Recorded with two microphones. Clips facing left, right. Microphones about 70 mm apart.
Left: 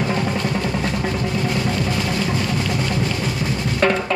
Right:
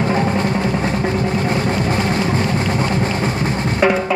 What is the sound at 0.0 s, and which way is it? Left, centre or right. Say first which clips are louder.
Music: right 4 dB; right.